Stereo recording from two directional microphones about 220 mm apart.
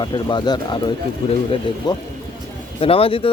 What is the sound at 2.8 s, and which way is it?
Speech, 25° left (ahead or behind).